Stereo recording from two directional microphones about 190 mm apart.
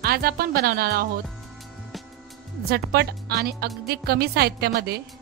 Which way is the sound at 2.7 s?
55° right (ahead or behind).